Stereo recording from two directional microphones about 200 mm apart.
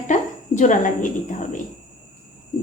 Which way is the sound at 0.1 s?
40° left (ahead or behind).